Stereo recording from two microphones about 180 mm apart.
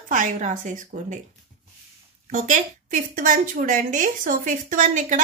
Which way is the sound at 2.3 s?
45° right (ahead or behind).